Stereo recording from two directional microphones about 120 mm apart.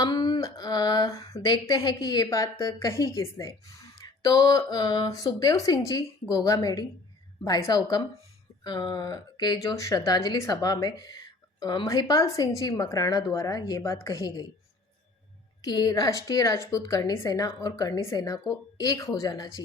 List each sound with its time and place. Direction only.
0.0 s a woman's voice: 35° left (ahead or behind)
15.6 s a woman's voice: 35° left (ahead or behind)